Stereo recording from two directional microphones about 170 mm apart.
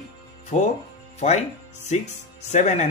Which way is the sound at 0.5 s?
40° left (ahead or behind).